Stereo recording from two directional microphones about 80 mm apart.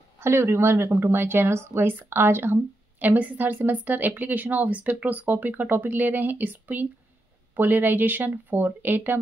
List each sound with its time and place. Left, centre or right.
0.2 s a woman's voice: right